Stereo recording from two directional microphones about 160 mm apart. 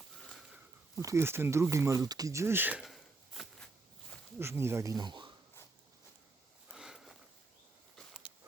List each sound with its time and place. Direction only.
0.2 s a sound: centre (ahead or behind)
0.9 s speech: 15° right (ahead or behind); by 3.7 s centre (ahead or behind)
4.4 s speech: 15° right (ahead or behind)
6.7 s sniff: centre (ahead or behind)